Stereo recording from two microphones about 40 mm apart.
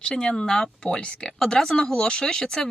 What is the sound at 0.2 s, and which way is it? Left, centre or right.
Speech, left.